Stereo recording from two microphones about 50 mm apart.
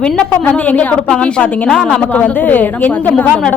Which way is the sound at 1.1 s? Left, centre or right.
Centre.